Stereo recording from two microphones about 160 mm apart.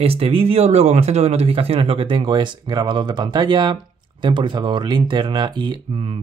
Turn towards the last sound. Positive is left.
turn(degrees=-30)  # may be behind; listen again after turning